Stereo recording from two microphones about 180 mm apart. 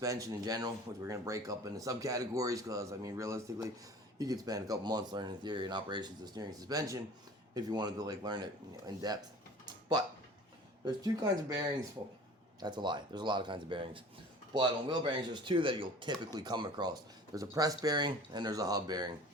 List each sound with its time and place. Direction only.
0.0 s speech: 20° right (ahead or behind)
10.8 s speech: 20° right (ahead or behind)
12.5 s speech: 25° right (ahead or behind)